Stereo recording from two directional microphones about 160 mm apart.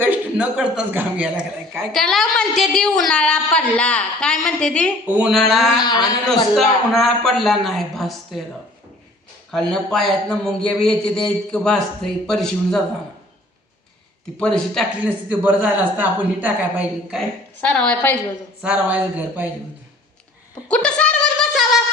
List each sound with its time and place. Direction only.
0.0 s a man's voice: 10° right (ahead or behind); by 4.9 s 5° left (ahead or behind)
5.0 s a woman's voice: 10° right (ahead or behind)
5.8 s a man's voice: 25° left (ahead or behind)
6.6 s a man's voice: centre (ahead or behind)
9.5 s a man's voice: centre (ahead or behind)
14.3 s a man's voice: 5° left (ahead or behind)
15.0 s a woman's voice: 10° right (ahead or behind)
17.6 s a woman's voice: 10° left (ahead or behind)
18.6 s a woman's voice: 10° right (ahead or behind)
20.7 s a sound: 5° left (ahead or behind)